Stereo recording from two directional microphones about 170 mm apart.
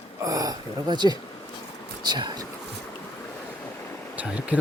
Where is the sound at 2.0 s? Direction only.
25° right (ahead or behind).